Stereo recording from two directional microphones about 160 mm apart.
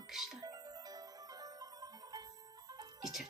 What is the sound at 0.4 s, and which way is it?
Music, 25° right (ahead or behind).